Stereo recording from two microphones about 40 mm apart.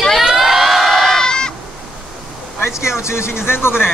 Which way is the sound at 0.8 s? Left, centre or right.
Centre.